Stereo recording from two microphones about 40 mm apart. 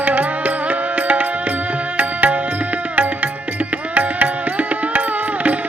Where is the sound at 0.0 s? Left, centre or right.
Right.